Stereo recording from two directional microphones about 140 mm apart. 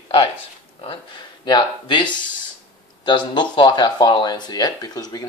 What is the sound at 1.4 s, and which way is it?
Speech, 35° left (ahead or behind).